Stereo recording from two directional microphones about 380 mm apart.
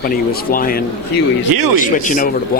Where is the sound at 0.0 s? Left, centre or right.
Left.